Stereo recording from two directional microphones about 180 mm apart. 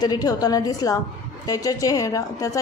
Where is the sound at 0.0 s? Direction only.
20° left (ahead or behind).